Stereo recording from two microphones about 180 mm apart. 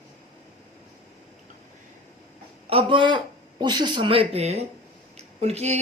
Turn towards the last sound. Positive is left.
turn(degrees=-35)  # may be behind; listen again after turning